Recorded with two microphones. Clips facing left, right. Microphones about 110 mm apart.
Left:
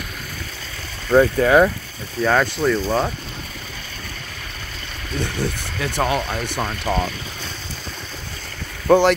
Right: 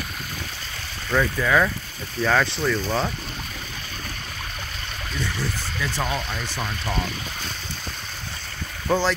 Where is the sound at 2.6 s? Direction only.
10° left (ahead or behind).